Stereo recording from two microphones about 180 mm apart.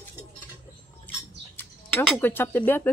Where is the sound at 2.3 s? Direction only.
10° left (ahead or behind).